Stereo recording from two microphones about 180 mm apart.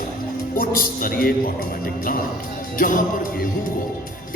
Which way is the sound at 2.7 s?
50° left (ahead or behind).